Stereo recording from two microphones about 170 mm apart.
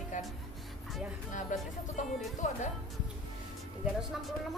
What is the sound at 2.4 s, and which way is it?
Speech, 45° left (ahead or behind).